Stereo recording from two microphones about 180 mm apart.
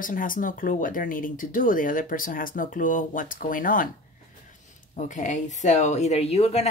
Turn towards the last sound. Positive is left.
turn(degrees=35)  # may be behind; listen again after turning